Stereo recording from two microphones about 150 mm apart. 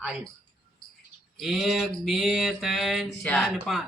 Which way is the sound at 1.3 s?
Centre (ahead or behind).